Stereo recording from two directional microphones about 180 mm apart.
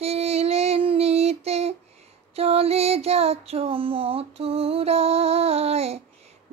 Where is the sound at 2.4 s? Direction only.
35° right (ahead or behind).